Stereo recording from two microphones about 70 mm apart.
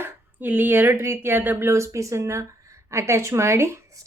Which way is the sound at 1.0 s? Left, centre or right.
Right.